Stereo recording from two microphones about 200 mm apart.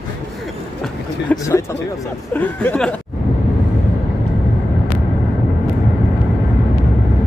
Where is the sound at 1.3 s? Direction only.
15° left (ahead or behind).